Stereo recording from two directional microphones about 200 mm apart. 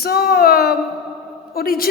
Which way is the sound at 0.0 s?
50° left (ahead or behind).